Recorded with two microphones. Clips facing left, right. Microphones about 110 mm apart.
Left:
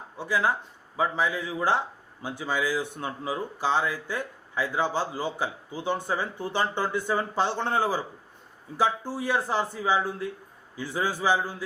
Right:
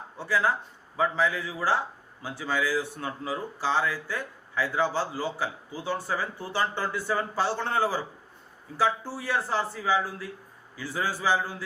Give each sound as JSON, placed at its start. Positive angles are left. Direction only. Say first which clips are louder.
{"t": 0.2, "sound": "speech", "louder": "even", "side_deg": 15}